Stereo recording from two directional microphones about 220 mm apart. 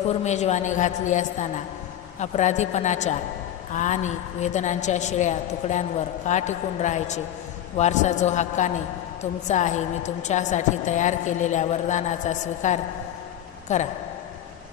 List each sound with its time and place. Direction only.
0.1 s a woman's voice: 30° left (ahead or behind)